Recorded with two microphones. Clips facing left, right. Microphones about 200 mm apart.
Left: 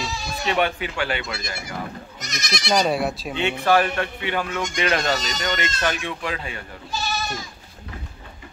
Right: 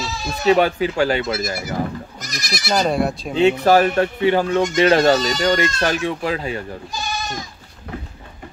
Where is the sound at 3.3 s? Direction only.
40° right (ahead or behind).